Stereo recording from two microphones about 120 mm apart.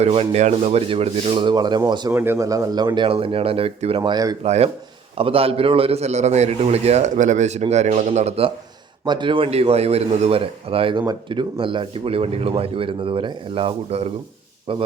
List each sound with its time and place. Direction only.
0.0 s a man's voice: 60° right (ahead or behind); by 2.1 s 35° right (ahead or behind)
2.1 s speech: 20° right (ahead or behind); by 4.1 s 50° right (ahead or behind)
4.1 s speech: 30° right (ahead or behind)
4.4 s speech: 65° right (ahead or behind)
5.1 s a man's voice: 50° right (ahead or behind); by 8.4 s 65° right (ahead or behind)
9.0 s speech: 40° right (ahead or behind)
11.0 s speech: 35° right (ahead or behind)